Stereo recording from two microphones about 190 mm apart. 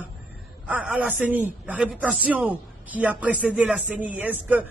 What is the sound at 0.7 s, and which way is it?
A man's voice, 5° right (ahead or behind).